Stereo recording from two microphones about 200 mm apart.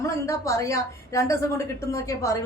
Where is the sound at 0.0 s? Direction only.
15° left (ahead or behind).